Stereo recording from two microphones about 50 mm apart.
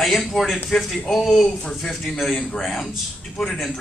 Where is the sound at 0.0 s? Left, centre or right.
Centre.